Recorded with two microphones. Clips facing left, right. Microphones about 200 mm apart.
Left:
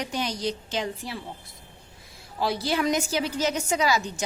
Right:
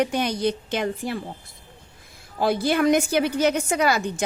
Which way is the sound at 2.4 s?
55° right (ahead or behind).